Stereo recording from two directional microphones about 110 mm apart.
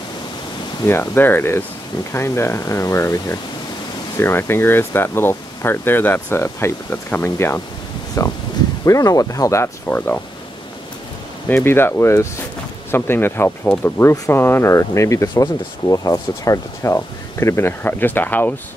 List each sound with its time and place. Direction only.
0.8 s speech: 20° left (ahead or behind)
11.4 s speech: 20° left (ahead or behind)